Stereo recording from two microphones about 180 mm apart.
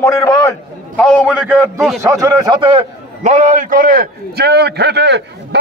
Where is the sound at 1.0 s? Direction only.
5° right (ahead or behind).